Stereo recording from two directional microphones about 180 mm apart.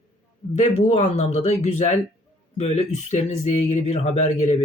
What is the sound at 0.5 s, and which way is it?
Speech, 40° left (ahead or behind).